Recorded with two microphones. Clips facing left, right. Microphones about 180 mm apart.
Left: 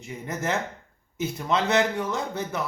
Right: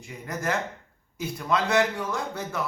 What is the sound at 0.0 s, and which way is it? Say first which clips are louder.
Speech: left 1 dB; 25° left (ahead or behind).